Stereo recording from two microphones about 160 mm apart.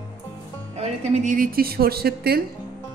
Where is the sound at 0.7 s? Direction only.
45° right (ahead or behind); by 2.4 s 75° right (ahead or behind).